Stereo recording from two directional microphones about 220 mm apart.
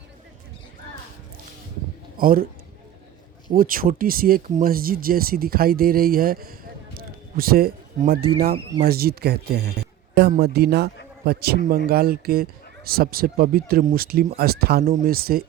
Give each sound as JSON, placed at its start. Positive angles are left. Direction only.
{"t": 2.1, "sound": "a man's voice", "side_deg": -40}
{"t": 3.5, "sound": "speech", "side_deg": -40}